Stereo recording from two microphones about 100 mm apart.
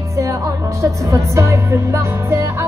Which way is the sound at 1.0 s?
30° right (ahead or behind).